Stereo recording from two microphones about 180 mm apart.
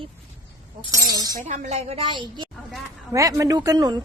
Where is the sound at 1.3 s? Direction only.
40° right (ahead or behind).